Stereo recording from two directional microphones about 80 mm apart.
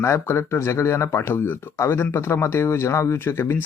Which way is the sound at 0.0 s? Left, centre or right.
Left.